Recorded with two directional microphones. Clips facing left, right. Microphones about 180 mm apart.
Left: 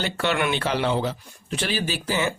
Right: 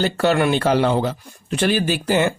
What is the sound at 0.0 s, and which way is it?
Speech, 40° right (ahead or behind).